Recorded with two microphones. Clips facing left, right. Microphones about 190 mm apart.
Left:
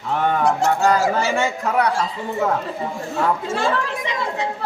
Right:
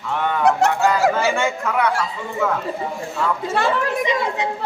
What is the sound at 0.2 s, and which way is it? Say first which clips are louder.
Goose: left 2 dB; 45° left (ahead or behind).